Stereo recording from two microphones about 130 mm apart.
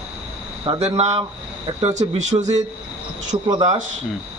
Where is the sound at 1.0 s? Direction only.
60° right (ahead or behind).